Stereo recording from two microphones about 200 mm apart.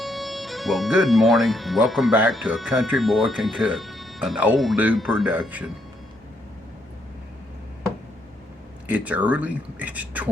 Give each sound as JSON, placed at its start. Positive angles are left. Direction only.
{"t": 0.0, "sound": "speech", "side_deg": 0}
{"t": 8.9, "sound": "speech", "side_deg": -5}